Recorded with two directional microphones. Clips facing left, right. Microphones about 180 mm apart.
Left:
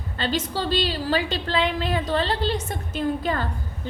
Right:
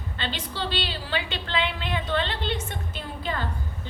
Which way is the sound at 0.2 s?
40° left (ahead or behind).